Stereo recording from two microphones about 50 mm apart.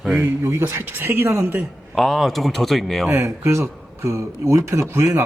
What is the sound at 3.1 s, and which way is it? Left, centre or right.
Speech, right.